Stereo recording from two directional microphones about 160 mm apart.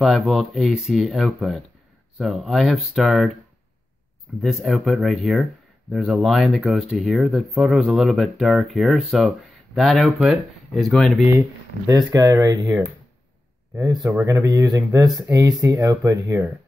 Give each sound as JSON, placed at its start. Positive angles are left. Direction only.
{"t": 0.3, "sound": "speech", "side_deg": 0}
{"t": 4.4, "sound": "speech", "side_deg": 0}
{"t": 11.9, "sound": "speech", "side_deg": -25}
{"t": 13.7, "sound": "speech", "side_deg": -20}